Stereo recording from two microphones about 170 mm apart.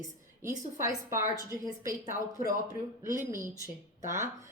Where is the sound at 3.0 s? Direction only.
15° right (ahead or behind).